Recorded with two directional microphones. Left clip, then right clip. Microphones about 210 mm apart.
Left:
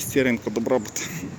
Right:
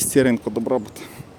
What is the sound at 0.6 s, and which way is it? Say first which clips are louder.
Speech: even; 10° right (ahead or behind).